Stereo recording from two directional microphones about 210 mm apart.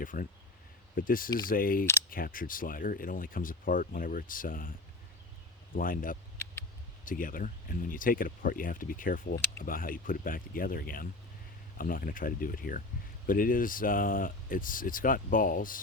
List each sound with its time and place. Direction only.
0.0 s speech: 40° left (ahead or behind)
5.7 s speech: 40° left (ahead or behind)
6.3 s vehicle: 10° left (ahead or behind)
7.0 s speech: 40° left (ahead or behind)